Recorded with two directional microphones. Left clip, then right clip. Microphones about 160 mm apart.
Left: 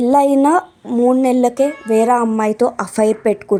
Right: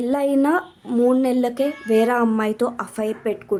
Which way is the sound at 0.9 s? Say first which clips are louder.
Left 3 dB; 10° left (ahead or behind).